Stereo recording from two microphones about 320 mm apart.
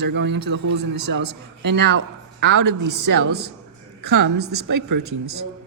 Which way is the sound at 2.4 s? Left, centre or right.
Right.